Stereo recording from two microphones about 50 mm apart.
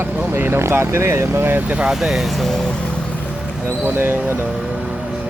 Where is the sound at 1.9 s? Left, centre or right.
Centre.